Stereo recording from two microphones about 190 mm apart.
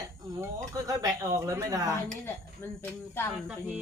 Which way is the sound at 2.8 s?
10° left (ahead or behind).